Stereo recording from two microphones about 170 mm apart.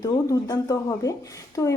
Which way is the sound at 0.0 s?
20° left (ahead or behind).